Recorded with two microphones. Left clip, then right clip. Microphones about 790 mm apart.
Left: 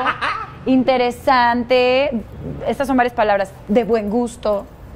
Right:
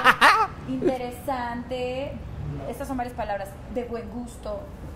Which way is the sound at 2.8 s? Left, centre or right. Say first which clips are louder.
Left 15 dB; left.